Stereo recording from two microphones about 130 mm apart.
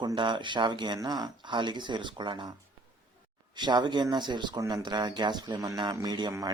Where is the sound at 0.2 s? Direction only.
40° right (ahead or behind).